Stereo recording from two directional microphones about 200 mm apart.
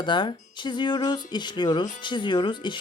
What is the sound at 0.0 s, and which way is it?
Speech, 25° left (ahead or behind).